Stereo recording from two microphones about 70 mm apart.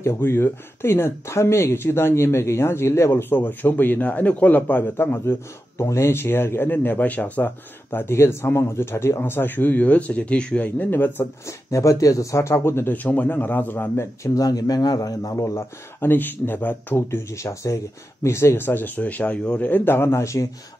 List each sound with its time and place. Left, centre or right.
0.0 s speech: left
11.4 s speech: left
12.9 s speech: left
14.2 s a man's voice: left
15.4 s speech: left
16.1 s speech: left
17.3 s speech: left